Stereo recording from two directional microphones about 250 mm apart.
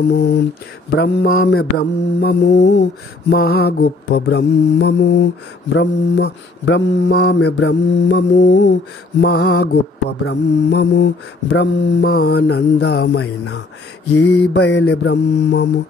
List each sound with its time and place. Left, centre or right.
0.1 s mantra: left